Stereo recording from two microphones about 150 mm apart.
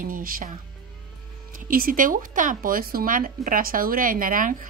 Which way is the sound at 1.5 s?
65° right (ahead or behind).